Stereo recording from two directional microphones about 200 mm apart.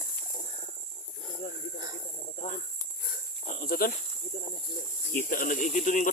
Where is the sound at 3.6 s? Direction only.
45° left (ahead or behind).